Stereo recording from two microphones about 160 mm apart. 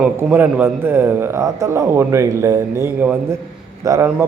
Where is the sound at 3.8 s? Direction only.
20° right (ahead or behind).